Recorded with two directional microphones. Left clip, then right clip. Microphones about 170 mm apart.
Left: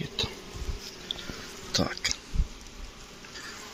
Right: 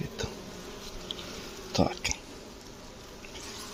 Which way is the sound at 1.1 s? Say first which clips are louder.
Left 3 dB; 5° left (ahead or behind).